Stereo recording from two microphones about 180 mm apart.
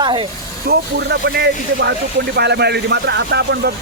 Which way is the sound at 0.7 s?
65° right (ahead or behind).